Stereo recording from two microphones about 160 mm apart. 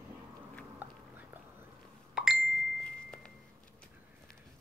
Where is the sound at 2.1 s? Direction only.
Centre (ahead or behind).